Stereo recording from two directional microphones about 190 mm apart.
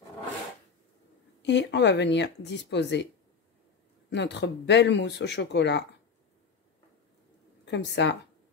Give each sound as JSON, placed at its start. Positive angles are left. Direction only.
{"t": 1.4, "sound": "speech", "side_deg": 65}
{"t": 4.1, "sound": "speech", "side_deg": 65}
{"t": 7.6, "sound": "speech", "side_deg": 65}